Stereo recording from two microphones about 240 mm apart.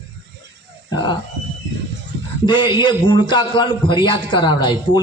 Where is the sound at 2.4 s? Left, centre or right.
Centre.